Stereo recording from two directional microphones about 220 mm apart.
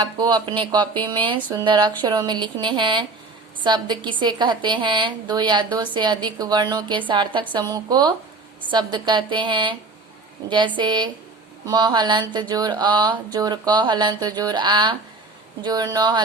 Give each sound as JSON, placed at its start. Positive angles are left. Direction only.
{"t": 0.0, "sound": "a woman's voice", "side_deg": -20}
{"t": 10.8, "sound": "a woman's voice", "side_deg": -20}